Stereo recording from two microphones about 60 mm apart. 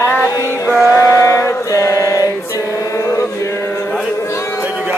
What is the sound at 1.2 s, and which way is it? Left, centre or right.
Mantra, left.